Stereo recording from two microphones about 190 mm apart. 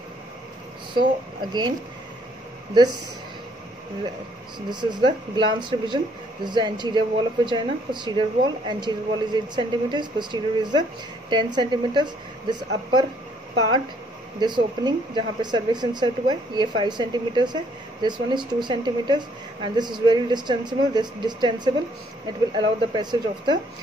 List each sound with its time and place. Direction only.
0.9 s speech: 25° right (ahead or behind)
4.6 s speech: 25° right (ahead or behind)
14.4 s speech: 20° right (ahead or behind)
22.9 s speech: 25° right (ahead or behind)